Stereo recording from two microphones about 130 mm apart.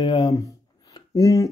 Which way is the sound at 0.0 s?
35° left (ahead or behind).